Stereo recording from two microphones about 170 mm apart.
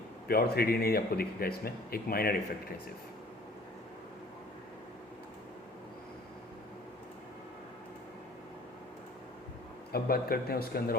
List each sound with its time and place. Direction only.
0.3 s speech: 65° left (ahead or behind)
9.9 s speech: 65° left (ahead or behind)